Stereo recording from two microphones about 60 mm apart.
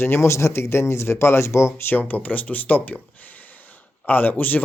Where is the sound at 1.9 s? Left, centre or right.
Left.